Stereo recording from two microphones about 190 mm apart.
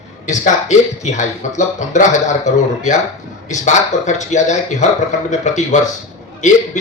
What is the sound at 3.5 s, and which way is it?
Speech, 40° left (ahead or behind).